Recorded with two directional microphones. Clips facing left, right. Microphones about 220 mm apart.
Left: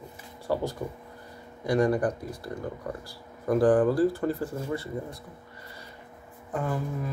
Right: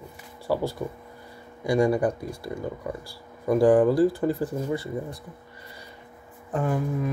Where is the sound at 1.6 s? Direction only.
10° right (ahead or behind).